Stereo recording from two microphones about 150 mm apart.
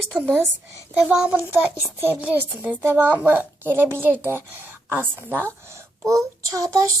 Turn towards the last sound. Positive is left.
turn(degrees=-20)  # may be behind; listen again after turning